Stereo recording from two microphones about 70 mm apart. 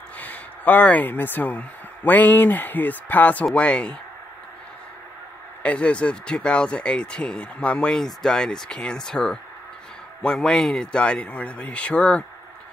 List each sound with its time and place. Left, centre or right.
0.2 s speech: left
5.6 s speech: centre